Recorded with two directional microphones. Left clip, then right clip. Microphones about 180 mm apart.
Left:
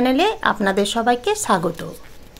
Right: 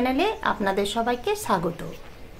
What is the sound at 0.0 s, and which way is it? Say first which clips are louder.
A woman's voice: left 6 dB; 40° left (ahead or behind).